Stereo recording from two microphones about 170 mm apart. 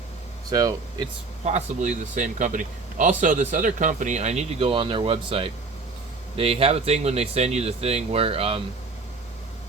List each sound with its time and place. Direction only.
0.5 s speech: 20° right (ahead or behind)
1.5 s speech: 45° right (ahead or behind)